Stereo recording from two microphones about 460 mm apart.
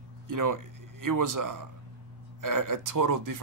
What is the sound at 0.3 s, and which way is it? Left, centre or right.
A man's voice, right.